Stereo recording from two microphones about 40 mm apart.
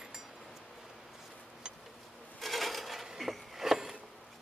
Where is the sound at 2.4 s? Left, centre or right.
Centre.